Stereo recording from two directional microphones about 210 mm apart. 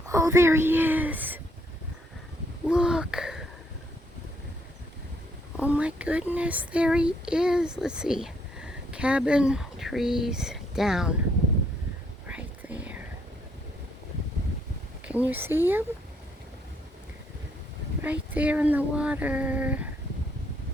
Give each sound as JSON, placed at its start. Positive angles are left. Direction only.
{"t": 0.1, "sound": "a woman's voice", "side_deg": -15}
{"t": 2.6, "sound": "a sound", "side_deg": -5}
{"t": 5.5, "sound": "speech", "side_deg": -5}
{"t": 12.3, "sound": "whispering", "side_deg": -5}
{"t": 15.0, "sound": "speech", "side_deg": -5}
{"t": 18.0, "sound": "speech", "side_deg": -5}